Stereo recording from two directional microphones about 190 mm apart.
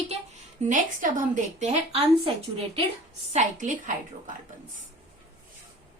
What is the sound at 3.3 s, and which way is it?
Speech, 40° right (ahead or behind).